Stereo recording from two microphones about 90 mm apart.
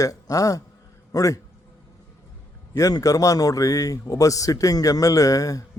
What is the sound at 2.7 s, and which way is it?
A man's voice, 40° left (ahead or behind).